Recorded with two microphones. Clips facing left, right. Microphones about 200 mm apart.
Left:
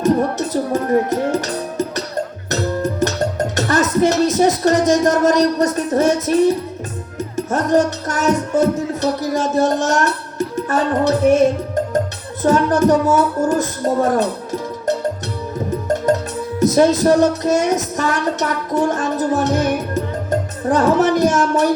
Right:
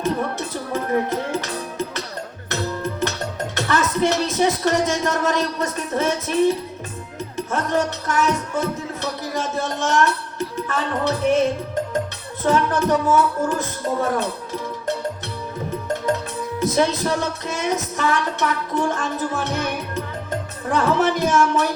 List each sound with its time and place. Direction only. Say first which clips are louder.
0.0 s music: left 7 dB; 45° left (ahead or behind)
2.5 s music: left 4 dB; 45° left (ahead or behind)
12.4 s speech: left 5 dB; 45° left (ahead or behind)
16.6 s music: left 7 dB; 45° left (ahead or behind)